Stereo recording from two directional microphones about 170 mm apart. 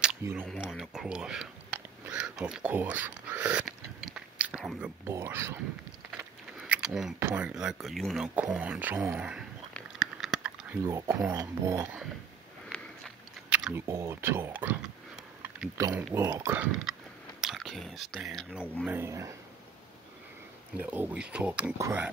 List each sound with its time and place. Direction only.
0.2 s speech: 10° right (ahead or behind)
0.5 s a sound: 5° right (ahead or behind)
6.6 s a sound: 5° right (ahead or behind)
7.2 s speech: 10° right (ahead or behind)
9.8 s a sound: centre (ahead or behind)
10.9 s speech: 20° right (ahead or behind)
12.7 s a sound: 5° left (ahead or behind)
13.5 s chewing: 5° right (ahead or behind)
13.8 s speech: 15° right (ahead or behind)
15.9 s speech: 5° right (ahead or behind)
16.2 s speech: 20° right (ahead or behind)
16.4 s speech: 10° right (ahead or behind)
20.7 s speech: 10° right (ahead or behind)